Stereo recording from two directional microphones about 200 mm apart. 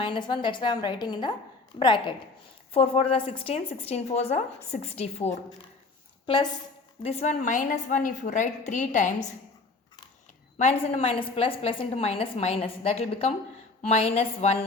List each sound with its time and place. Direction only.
0.0 s a woman's voice: 25° left (ahead or behind)
7.0 s a woman's voice: 30° left (ahead or behind)
10.6 s a woman's voice: 35° left (ahead or behind)